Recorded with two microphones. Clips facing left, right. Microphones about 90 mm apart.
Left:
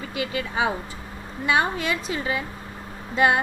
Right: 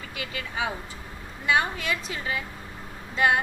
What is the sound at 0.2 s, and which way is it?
Speech, 20° left (ahead or behind).